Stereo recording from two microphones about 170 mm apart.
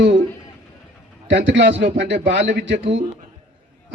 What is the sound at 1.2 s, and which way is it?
A man's voice, 90° right.